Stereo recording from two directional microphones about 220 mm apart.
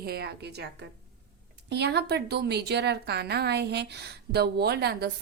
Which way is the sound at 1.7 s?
50° right (ahead or behind).